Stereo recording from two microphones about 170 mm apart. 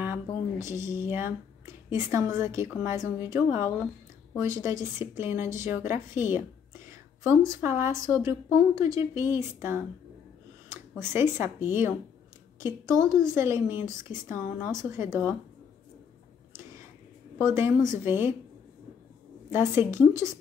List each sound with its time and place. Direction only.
0.0 s a woman's voice: 15° right (ahead or behind)
17.4 s a woman's voice: 15° right (ahead or behind)
19.5 s a woman's voice: 15° right (ahead or behind)